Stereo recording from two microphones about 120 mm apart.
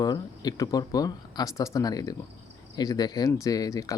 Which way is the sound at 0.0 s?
35° left (ahead or behind).